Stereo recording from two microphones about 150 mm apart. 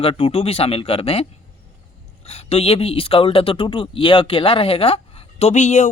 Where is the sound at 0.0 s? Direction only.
40° left (ahead or behind).